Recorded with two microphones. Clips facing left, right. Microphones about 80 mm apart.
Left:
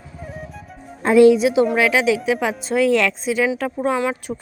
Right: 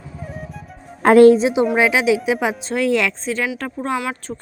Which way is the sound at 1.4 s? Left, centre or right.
Right.